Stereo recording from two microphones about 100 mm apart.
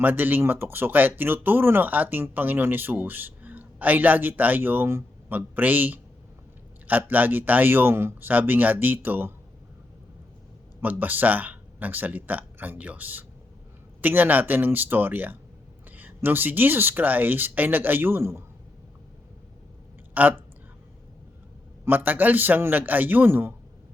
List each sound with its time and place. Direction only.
0.0 s speech: 20° right (ahead or behind)
10.8 s speech: 20° right (ahead or behind)
20.1 s speech: 15° right (ahead or behind)
21.8 s speech: 20° right (ahead or behind)